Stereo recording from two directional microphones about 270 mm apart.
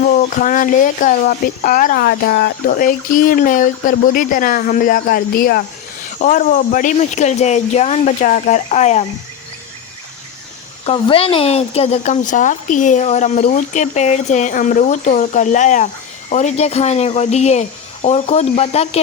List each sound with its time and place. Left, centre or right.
0.0 s speech: left
10.8 s speech: left